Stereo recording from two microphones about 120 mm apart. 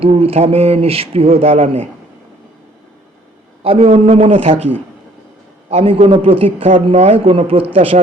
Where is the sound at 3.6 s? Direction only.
60° right (ahead or behind).